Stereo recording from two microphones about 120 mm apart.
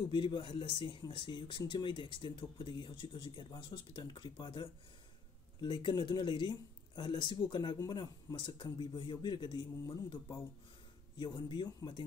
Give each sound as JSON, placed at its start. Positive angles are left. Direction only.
{"t": 0.1, "sound": "speech", "side_deg": 40}
{"t": 11.1, "sound": "speech", "side_deg": 40}